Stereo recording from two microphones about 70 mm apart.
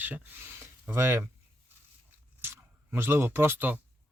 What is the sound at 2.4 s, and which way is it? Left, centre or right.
Speech, right.